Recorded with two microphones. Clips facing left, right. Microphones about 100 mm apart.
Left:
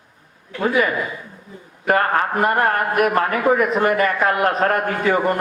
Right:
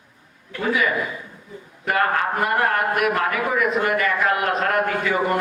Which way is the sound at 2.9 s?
45° left (ahead or behind).